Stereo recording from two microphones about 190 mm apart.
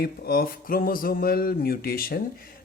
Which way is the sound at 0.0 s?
50° left (ahead or behind).